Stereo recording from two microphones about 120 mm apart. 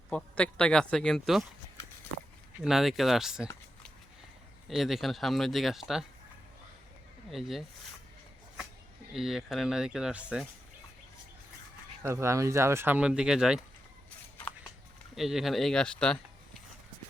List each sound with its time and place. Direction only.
0.2 s speech: 10° left (ahead or behind)
2.6 s speech: 5° right (ahead or behind)
4.7 s speech: centre (ahead or behind)
7.3 s speech: centre (ahead or behind)
9.1 s speech: centre (ahead or behind)
12.0 s speech: 25° right (ahead or behind); by 13.6 s 5° right (ahead or behind)
15.1 s speech: 5° right (ahead or behind)